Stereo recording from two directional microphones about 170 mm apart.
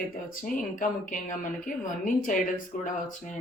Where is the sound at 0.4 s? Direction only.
50° left (ahead or behind).